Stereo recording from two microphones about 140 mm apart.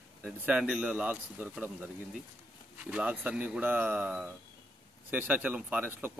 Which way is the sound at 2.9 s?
10° right (ahead or behind).